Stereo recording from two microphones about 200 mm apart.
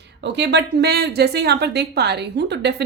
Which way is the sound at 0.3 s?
60° right (ahead or behind).